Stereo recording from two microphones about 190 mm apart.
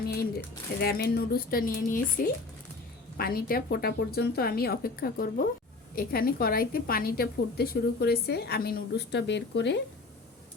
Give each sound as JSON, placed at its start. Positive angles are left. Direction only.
{"t": 0.1, "sound": "a woman's voice", "side_deg": 55}